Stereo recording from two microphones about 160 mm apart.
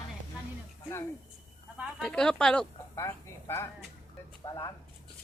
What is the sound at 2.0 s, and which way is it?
Speech, 5° left (ahead or behind).